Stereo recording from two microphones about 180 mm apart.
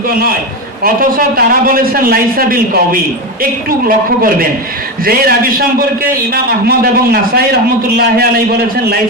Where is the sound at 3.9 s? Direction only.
50° right (ahead or behind).